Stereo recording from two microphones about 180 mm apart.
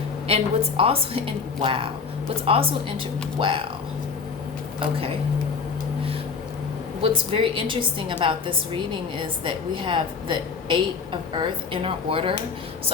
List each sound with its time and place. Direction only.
0.3 s a woman's voice: 35° right (ahead or behind)
7.0 s a woman's voice: 30° right (ahead or behind)